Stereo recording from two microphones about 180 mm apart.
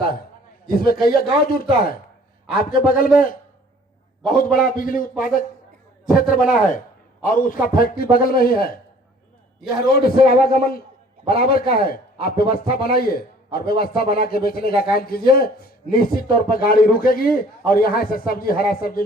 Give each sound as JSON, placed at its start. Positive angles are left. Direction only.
{"t": 0.7, "sound": "a man's voice", "side_deg": 55}
{"t": 4.5, "sound": "a man's voice", "side_deg": 50}
{"t": 9.9, "sound": "a man's voice", "side_deg": 55}